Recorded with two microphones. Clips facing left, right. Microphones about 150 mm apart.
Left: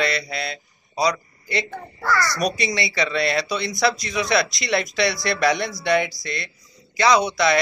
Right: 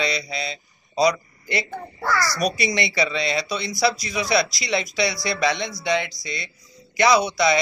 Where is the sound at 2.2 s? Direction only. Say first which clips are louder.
Even; centre (ahead or behind).